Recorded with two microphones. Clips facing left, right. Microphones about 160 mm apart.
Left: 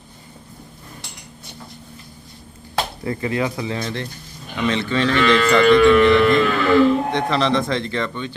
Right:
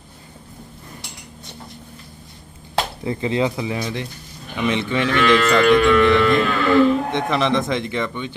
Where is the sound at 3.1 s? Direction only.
20° right (ahead or behind).